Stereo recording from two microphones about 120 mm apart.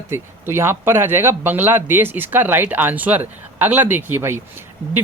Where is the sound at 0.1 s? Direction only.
20° right (ahead or behind).